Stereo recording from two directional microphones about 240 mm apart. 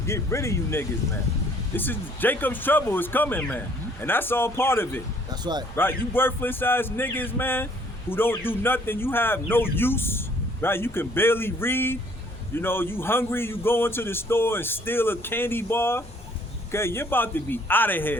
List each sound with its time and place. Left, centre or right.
0.0 s speech: centre
5.3 s speech: centre
5.7 s speech: centre